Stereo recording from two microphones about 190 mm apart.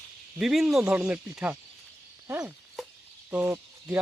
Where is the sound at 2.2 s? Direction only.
15° right (ahead or behind).